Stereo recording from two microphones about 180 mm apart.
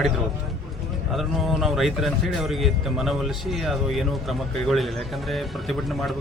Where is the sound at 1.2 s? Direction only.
Centre (ahead or behind).